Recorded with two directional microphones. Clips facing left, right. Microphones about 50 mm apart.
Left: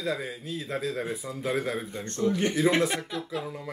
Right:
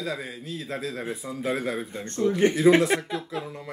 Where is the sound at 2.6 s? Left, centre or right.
Centre.